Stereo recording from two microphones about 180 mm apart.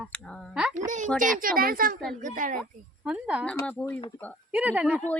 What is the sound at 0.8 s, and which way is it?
Speech, 45° right (ahead or behind).